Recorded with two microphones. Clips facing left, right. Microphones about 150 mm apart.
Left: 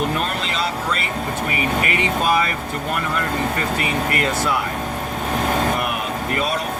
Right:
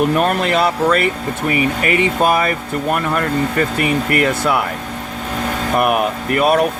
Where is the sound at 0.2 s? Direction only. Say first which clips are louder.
Right 8 dB; 55° right (ahead or behind).